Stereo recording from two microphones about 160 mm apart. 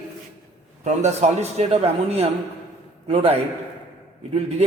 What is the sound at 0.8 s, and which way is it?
Speech, 45° right (ahead or behind).